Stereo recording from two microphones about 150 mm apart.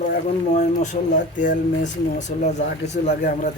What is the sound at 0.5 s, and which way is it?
Speech, 55° left (ahead or behind).